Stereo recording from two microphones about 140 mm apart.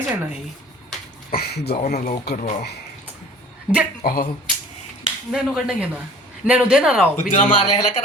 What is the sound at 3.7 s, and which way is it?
Speech, 5° right (ahead or behind).